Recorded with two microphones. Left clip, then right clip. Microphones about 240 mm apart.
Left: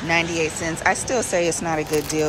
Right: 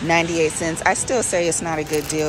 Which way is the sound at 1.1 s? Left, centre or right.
Centre.